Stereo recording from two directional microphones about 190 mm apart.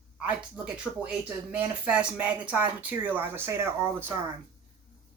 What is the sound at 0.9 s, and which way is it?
Speech, 10° left (ahead or behind).